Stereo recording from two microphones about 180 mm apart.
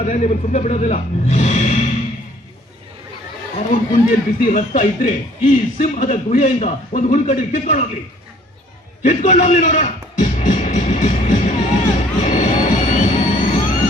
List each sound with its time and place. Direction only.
0.0 s speech: 45° left (ahead or behind)
4.1 s speech: 50° left (ahead or behind)
9.0 s music: 40° left (ahead or behind)